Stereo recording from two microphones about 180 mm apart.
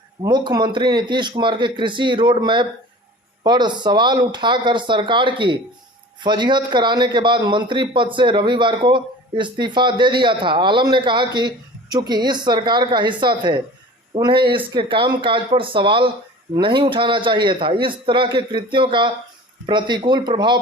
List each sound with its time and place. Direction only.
0.2 s a man's voice: 25° right (ahead or behind)